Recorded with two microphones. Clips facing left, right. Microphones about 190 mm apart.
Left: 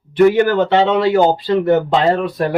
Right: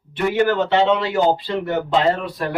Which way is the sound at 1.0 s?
45° left (ahead or behind).